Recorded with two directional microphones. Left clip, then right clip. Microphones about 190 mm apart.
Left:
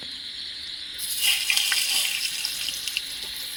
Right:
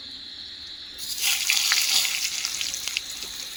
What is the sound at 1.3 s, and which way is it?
Frying, 10° right (ahead or behind).